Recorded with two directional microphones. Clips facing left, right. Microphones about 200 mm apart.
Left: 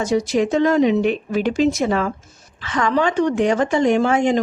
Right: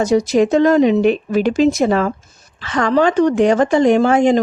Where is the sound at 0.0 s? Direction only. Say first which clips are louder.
Right 5 dB; 40° right (ahead or behind).